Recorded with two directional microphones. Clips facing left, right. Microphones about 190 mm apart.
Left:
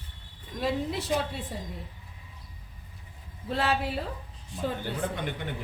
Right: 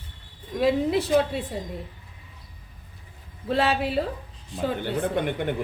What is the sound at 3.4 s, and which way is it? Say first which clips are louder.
A woman's voice: right 5 dB; 90° right.